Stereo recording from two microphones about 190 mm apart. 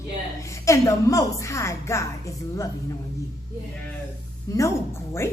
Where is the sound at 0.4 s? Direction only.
15° left (ahead or behind).